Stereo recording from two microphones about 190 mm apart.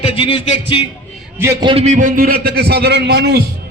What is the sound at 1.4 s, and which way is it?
Speech, 15° right (ahead or behind).